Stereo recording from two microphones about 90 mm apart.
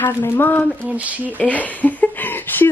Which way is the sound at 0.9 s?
15° right (ahead or behind).